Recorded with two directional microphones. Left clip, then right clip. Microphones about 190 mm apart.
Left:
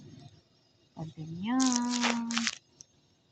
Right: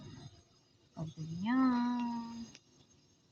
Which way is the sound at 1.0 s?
20° right (ahead or behind).